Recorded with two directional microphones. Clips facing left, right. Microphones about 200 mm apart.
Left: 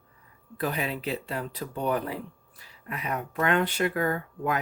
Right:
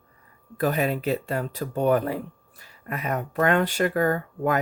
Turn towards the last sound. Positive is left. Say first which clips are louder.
# right 5 dB
turn(degrees=-45)  # may be behind; listen again after turning